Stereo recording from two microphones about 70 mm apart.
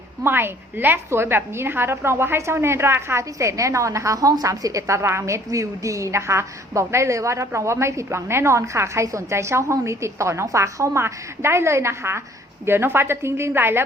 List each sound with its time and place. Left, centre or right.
0.2 s a woman's voice: right
3.3 s a woman's voice: right